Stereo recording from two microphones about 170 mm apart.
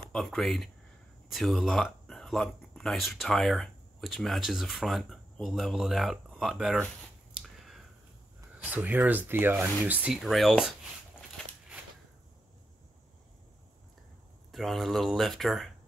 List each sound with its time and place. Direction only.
0.1 s speech: centre (ahead or behind)
8.6 s speech: 10° right (ahead or behind)
14.5 s speech: centre (ahead or behind)